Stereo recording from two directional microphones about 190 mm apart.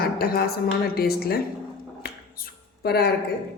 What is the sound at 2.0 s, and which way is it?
Finger snapping, 55° left (ahead or behind).